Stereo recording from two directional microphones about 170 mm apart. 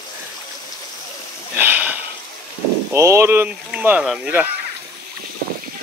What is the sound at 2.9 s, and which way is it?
Speech, 15° right (ahead or behind).